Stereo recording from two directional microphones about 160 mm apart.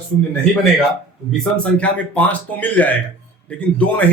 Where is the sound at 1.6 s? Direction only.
10° left (ahead or behind).